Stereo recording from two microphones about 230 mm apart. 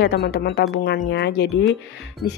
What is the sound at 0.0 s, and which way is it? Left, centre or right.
A woman's voice, left.